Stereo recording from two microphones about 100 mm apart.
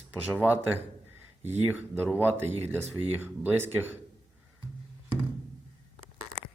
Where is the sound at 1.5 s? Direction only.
20° right (ahead or behind).